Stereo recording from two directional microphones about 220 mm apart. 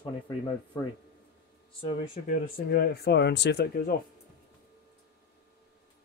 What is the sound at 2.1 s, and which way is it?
Speech, 40° left (ahead or behind).